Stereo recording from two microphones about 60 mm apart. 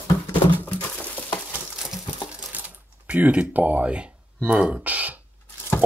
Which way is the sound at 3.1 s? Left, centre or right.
Right.